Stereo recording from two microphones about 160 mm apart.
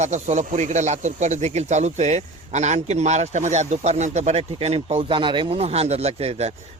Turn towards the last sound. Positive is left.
turn(degrees=-40)  # may be behind; listen again after turning